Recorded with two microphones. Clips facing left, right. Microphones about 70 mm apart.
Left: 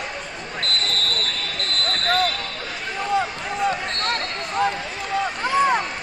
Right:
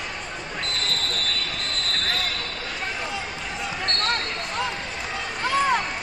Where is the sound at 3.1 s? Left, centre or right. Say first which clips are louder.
Left 8 dB; left.